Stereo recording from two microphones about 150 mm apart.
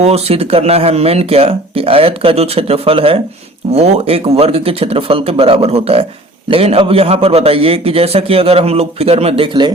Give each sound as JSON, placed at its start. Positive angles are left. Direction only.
{"t": 0.0, "sound": "a man's voice", "side_deg": -45}